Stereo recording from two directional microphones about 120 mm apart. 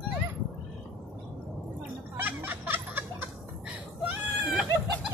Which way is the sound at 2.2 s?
15° right (ahead or behind).